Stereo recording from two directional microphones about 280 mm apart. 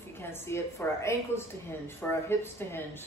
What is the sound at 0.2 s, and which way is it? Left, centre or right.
Speech, centre.